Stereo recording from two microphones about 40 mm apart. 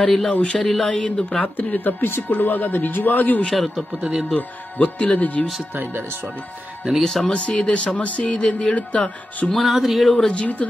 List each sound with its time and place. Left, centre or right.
0.0 s speech: centre
0.3 s speech: left
0.6 s speech: centre
1.4 s speech: left
1.9 s speech: left
2.3 s a man's voice: left
3.5 s music: centre
4.0 s speech: centre
4.4 s speech: left
7.0 s music: centre
7.3 s speech: left
9.5 s music: centre
10.3 s speech: left